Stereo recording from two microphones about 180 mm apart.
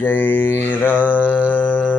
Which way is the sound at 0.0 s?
10° left (ahead or behind).